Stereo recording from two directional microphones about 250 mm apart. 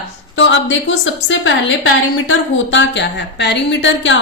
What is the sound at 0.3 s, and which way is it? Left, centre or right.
A woman's voice, left.